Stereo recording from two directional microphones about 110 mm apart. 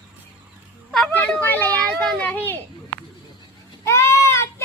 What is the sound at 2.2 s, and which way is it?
Speech, 20° left (ahead or behind).